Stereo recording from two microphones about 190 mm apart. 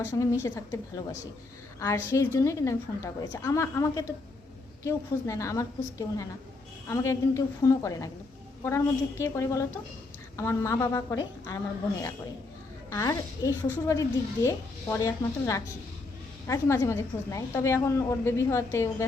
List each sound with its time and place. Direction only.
0.0 s a woman's voice: 15° left (ahead or behind)
12.9 s a woman's voice: 15° left (ahead or behind)